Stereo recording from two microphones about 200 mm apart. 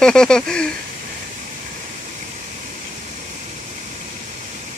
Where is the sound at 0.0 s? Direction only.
5° left (ahead or behind).